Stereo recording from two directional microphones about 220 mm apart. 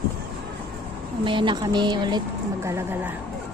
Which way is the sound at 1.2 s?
20° right (ahead or behind).